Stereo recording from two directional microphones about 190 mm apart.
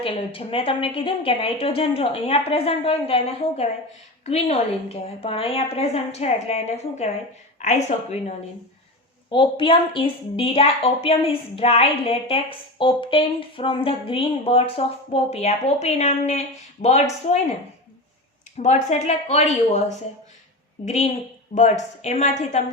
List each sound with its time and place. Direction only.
0.0 s a woman's voice: 30° left (ahead or behind)
9.3 s a woman's voice: 25° left (ahead or behind)
18.5 s a woman's voice: 40° left (ahead or behind)